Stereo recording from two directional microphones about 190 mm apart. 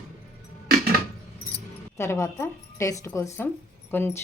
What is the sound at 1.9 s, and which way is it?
A woman's voice, 15° left (ahead or behind).